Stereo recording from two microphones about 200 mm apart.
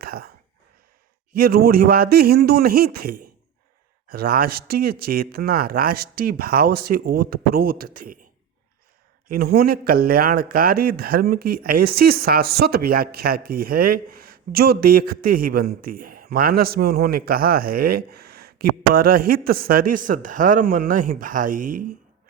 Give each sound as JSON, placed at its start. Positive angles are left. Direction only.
{"t": 0.0, "sound": "a sound", "side_deg": -50}
{"t": 1.3, "sound": "speech", "side_deg": -50}
{"t": 9.2, "sound": "speech", "side_deg": -50}